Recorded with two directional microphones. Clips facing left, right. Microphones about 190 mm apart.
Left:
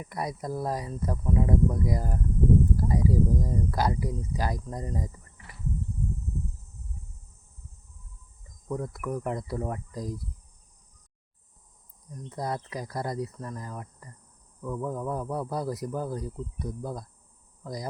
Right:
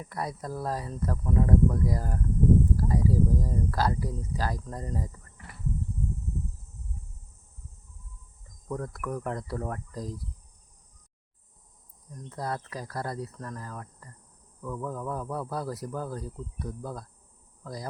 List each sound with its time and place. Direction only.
0.0 s speech: 15° left (ahead or behind)
8.6 s speech: 10° left (ahead or behind)
12.1 s speech: 15° left (ahead or behind)
17.6 s cricket: 15° left (ahead or behind)